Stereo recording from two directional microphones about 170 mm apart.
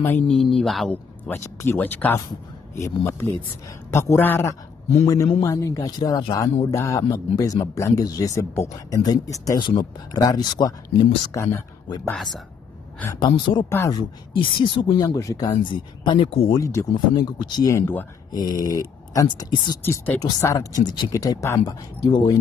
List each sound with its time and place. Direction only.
0.0 s speech: 10° left (ahead or behind)
12.0 s speech: centre (ahead or behind)
13.1 s speech: 25° left (ahead or behind)
13.7 s speech: 15° left (ahead or behind)
14.3 s speech: 30° left (ahead or behind)
16.5 s speech: 20° left (ahead or behind)
19.8 s speech: 10° left (ahead or behind)